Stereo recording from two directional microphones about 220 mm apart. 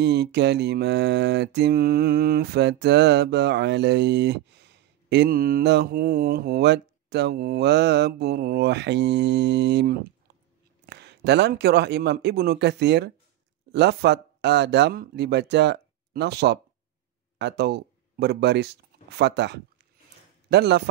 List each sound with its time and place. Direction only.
0.0 s mantra: 50° right (ahead or behind)
13.7 s speech: 50° right (ahead or behind)
20.4 s mantra: 50° right (ahead or behind)